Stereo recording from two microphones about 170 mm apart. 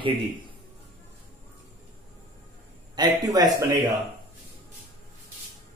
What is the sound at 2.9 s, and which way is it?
Speech, 25° right (ahead or behind).